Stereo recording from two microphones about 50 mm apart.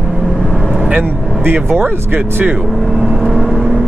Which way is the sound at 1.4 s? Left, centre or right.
Right.